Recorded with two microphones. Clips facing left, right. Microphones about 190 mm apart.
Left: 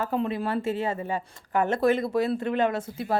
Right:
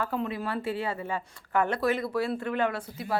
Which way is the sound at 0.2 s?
25° left (ahead or behind).